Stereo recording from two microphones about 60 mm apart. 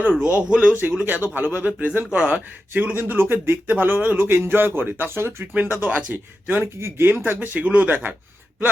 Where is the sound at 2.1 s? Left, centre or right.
Centre.